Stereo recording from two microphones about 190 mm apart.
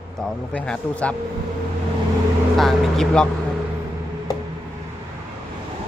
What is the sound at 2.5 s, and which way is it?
Speech, centre (ahead or behind).